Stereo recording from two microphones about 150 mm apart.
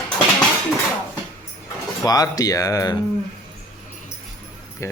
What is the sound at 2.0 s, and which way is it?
Speech, 25° left (ahead or behind).